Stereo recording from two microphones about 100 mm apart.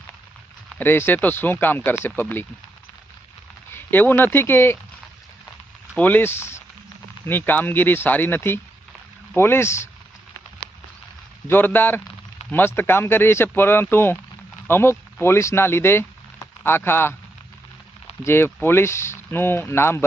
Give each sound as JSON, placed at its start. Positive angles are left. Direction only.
{"t": 0.8, "sound": "speech", "side_deg": 20}
{"t": 3.7, "sound": "speech", "side_deg": 20}
{"t": 6.0, "sound": "speech", "side_deg": 15}
{"t": 11.4, "sound": "speech", "side_deg": 20}
{"t": 18.2, "sound": "speech", "side_deg": 25}